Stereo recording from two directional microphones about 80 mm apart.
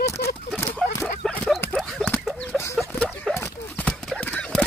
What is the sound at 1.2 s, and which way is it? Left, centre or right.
Dog, centre.